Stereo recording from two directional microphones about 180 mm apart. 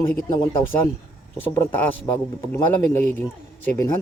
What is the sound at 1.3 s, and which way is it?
Speech, 10° left (ahead or behind).